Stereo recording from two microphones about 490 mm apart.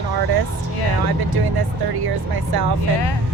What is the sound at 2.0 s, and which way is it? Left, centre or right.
Speech, right.